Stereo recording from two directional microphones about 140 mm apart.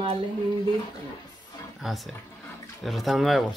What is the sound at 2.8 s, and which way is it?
Speech, centre (ahead or behind).